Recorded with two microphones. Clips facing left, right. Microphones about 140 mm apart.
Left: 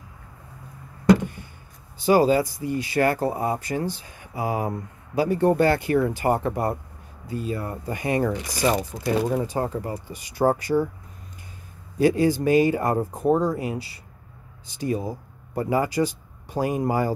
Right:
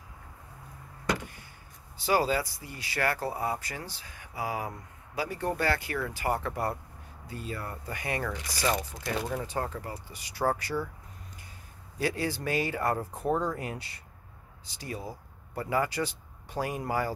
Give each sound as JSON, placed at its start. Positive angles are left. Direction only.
{"t": 1.0, "sound": "a sound", "side_deg": 25}
{"t": 2.0, "sound": "speech", "side_deg": 20}
{"t": 12.0, "sound": "speech", "side_deg": 15}